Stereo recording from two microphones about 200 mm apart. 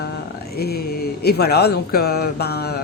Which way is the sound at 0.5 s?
50° left (ahead or behind).